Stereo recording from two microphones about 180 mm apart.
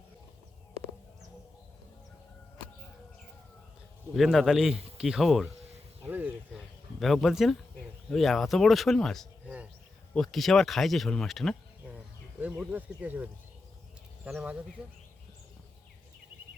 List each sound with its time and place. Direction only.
4.1 s speech: centre (ahead or behind)
6.1 s a sound: 10° right (ahead or behind)
7.0 s speech: centre (ahead or behind)
14.3 s speech: 5° right (ahead or behind)